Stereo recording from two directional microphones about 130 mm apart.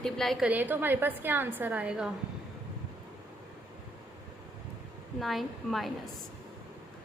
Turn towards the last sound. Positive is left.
turn(degrees=0)  # may be behind; listen again after turning